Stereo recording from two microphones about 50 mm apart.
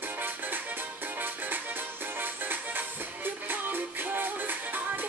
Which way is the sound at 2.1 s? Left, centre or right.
Right.